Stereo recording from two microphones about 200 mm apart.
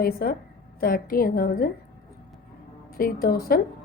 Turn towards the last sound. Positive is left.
turn(degrees=45)  # may be behind; listen again after turning